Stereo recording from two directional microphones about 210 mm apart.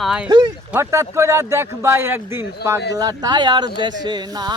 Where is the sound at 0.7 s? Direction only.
15° right (ahead or behind).